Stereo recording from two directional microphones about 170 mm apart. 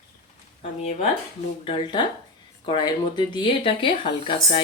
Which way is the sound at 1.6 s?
30° left (ahead or behind).